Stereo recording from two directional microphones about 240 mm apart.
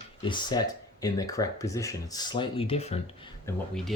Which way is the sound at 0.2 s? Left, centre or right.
Centre.